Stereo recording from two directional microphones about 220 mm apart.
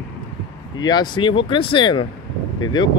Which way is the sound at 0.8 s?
20° left (ahead or behind).